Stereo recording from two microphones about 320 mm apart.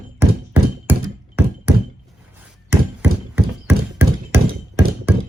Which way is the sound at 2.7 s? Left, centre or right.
Centre.